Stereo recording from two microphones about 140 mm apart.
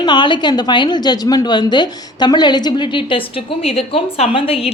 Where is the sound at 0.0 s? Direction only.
35° left (ahead or behind).